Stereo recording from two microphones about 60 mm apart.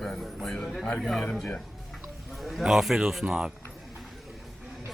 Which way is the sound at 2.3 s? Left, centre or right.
Centre.